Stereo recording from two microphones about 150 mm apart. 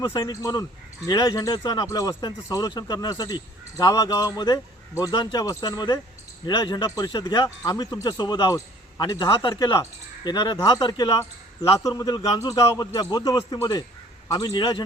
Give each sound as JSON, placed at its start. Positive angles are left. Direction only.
{"t": 0.0, "sound": "speech", "side_deg": 20}